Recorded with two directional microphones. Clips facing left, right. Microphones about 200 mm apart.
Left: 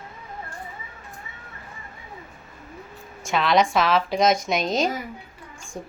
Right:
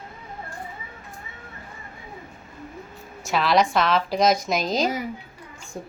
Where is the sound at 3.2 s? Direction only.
Centre (ahead or behind).